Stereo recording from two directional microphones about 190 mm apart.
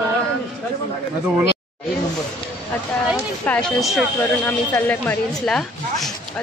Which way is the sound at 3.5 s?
Centre (ahead or behind).